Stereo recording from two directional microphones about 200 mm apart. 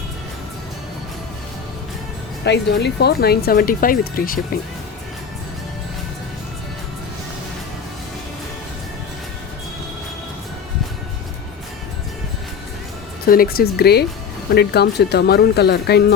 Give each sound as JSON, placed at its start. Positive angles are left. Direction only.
{"t": 2.4, "sound": "speech", "side_deg": 60}
{"t": 13.2, "sound": "speech", "side_deg": 45}